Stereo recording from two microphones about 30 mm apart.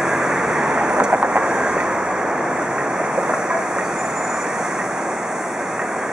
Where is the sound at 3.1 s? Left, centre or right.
Centre.